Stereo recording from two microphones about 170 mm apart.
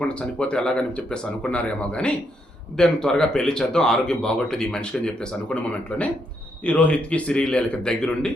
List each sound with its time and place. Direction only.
0.0 s speech: 5° left (ahead or behind)